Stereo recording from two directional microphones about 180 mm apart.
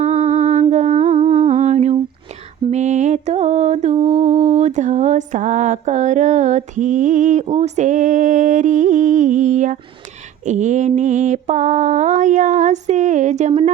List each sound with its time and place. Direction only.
0.0 s humming: 40° right (ahead or behind)
2.6 s mantra: 40° right (ahead or behind)